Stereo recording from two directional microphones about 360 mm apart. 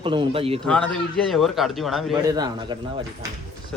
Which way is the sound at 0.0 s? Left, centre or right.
Centre.